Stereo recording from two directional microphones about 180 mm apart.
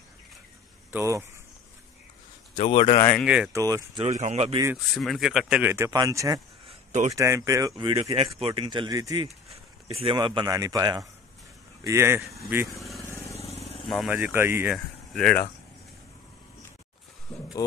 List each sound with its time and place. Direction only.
0.9 s speech: 15° right (ahead or behind)
2.5 s speech: 30° left (ahead or behind)
3.5 s speech: 20° right (ahead or behind)
4.0 s speech: 40° right (ahead or behind)
4.9 s speech: centre (ahead or behind); by 6.4 s 20° right (ahead or behind)
6.7 s a sound: 40° right (ahead or behind)
7.2 s speech: 15° right (ahead or behind)
8.0 s speech: 30° right (ahead or behind); by 12.6 s 15° right (ahead or behind)
12.7 s vehicle: centre (ahead or behind)
13.4 s vehicle: 35° left (ahead or behind)
13.8 s speech: centre (ahead or behind)
14.1 s speech: 10° right (ahead or behind)
14.7 s speech: 5° left (ahead or behind)
17.3 s a sound: 5° left (ahead or behind)